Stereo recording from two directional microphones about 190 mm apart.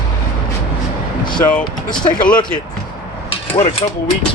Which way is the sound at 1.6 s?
25° left (ahead or behind).